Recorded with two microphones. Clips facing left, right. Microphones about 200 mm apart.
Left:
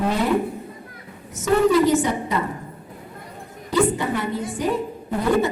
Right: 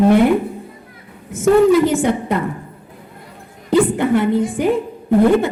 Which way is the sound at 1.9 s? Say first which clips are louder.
Right 3 dB; 55° right (ahead or behind).